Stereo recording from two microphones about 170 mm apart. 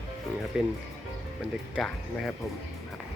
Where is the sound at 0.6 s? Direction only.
5° right (ahead or behind).